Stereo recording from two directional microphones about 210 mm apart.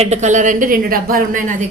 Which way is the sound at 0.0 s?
35° right (ahead or behind).